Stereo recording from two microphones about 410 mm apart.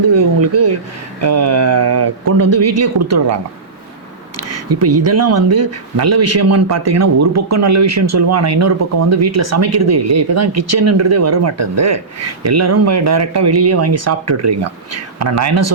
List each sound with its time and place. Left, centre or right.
0.1 s speech: right
4.4 s speech: right